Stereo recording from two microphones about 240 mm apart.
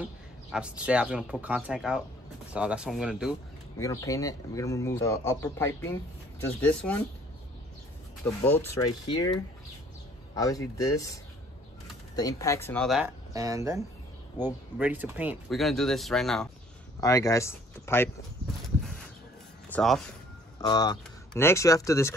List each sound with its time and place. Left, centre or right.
0.0 s speech: centre
3.7 s speech: centre
8.5 s speech: centre
10.3 s speech: centre
12.2 s speech: centre
13.3 s speech: centre
17.0 s speech: centre
19.7 s speech: centre
20.6 s speech: centre